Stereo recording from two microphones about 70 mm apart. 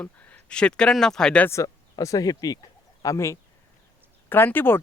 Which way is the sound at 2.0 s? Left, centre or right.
Left.